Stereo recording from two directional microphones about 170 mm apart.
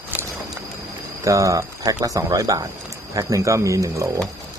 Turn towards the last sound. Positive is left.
turn(degrees=-20)  # may be behind; listen again after turning